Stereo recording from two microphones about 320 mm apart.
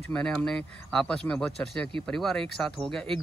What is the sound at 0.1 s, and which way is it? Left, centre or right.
Speech, centre.